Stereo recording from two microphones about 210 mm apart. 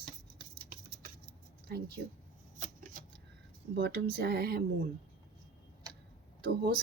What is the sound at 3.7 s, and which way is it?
Speech, 50° right (ahead or behind).